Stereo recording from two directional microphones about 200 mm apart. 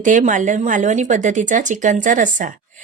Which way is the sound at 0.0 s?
40° right (ahead or behind).